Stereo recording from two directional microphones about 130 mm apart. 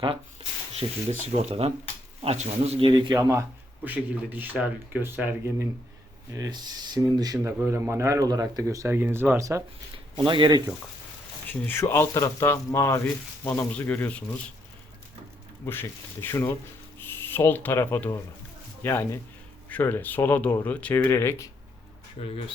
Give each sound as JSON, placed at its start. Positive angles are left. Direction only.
{"t": 0.8, "sound": "speech", "side_deg": -55}
{"t": 3.8, "sound": "speech", "side_deg": -10}
{"t": 6.3, "sound": "speech", "side_deg": -30}
{"t": 10.2, "sound": "speech", "side_deg": -40}
{"t": 11.6, "sound": "speech", "side_deg": 15}
{"t": 15.6, "sound": "speech", "side_deg": 15}
{"t": 22.2, "sound": "speech", "side_deg": 65}